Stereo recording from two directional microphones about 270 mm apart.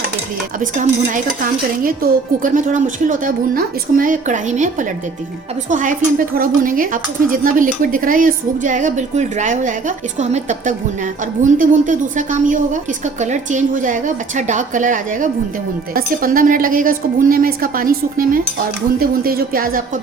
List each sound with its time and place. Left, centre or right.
0.6 s a woman's voice: right